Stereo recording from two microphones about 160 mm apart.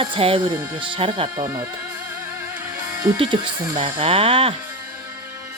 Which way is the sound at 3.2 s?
35° right (ahead or behind).